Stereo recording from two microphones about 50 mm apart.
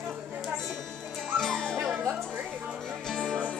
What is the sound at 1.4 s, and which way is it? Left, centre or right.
Dog, centre.